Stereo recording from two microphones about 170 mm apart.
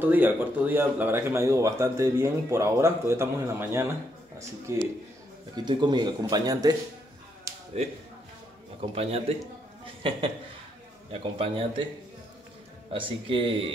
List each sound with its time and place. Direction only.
0.0 s speech: 10° right (ahead or behind)
5.7 s speech: 25° right (ahead or behind)
7.5 s a sound: 20° right (ahead or behind)
8.9 s a man's voice: 35° right (ahead or behind)
11.1 s a man's voice: 35° right (ahead or behind)
12.9 s a man's voice: 30° right (ahead or behind)